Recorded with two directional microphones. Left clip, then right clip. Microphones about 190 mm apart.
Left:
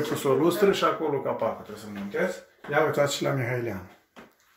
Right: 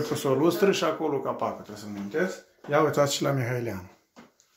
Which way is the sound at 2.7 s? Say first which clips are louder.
Right 1 dB; 35° right (ahead or behind).